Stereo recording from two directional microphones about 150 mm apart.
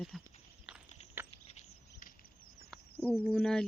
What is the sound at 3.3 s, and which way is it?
Speech, 5° left (ahead or behind).